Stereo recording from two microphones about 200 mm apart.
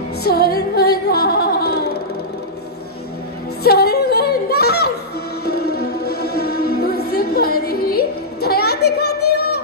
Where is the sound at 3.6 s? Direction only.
50° left (ahead or behind).